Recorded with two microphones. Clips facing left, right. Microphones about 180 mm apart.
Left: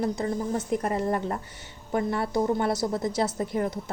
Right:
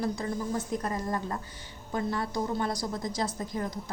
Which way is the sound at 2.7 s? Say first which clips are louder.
Left 6 dB; 25° left (ahead or behind).